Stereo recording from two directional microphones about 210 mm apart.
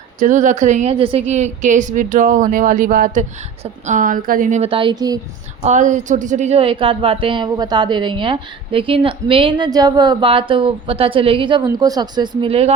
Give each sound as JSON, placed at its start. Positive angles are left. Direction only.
{"t": 0.2, "sound": "a woman's voice", "side_deg": -35}
{"t": 5.6, "sound": "a woman's voice", "side_deg": -35}